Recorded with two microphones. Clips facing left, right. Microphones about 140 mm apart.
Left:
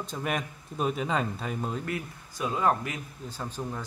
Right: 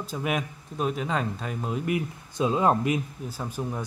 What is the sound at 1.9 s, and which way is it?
Speech, 20° right (ahead or behind).